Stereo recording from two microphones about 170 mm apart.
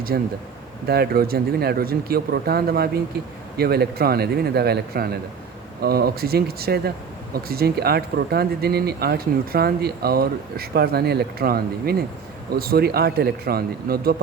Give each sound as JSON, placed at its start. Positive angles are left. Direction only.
{"t": 0.1, "sound": "a man's voice", "side_deg": -65}